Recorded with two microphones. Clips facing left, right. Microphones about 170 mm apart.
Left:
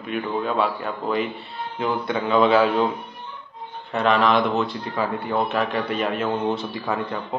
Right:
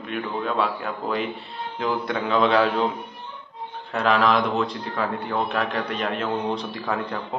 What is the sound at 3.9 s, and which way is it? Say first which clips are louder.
A man's voice: left 1 dB; centre (ahead or behind).